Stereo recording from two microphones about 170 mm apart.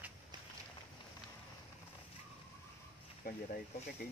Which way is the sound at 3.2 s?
60° left (ahead or behind).